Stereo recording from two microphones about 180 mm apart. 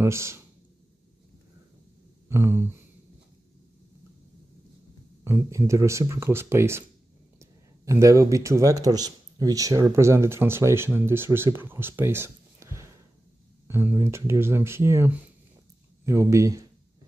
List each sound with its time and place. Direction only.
0.0 s speech: 15° right (ahead or behind)
2.2 s a sound: 15° right (ahead or behind)
5.2 s speech: 15° right (ahead or behind)